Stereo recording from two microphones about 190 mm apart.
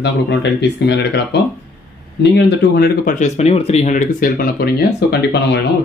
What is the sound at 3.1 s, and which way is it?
Speech, 35° left (ahead or behind).